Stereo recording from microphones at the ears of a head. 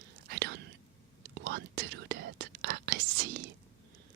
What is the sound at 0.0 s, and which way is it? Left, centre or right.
Whispering, right.